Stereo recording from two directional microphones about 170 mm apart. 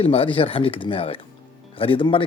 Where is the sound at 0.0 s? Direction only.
35° left (ahead or behind).